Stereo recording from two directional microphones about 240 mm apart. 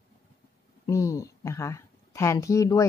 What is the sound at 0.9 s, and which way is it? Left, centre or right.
A woman's voice, centre.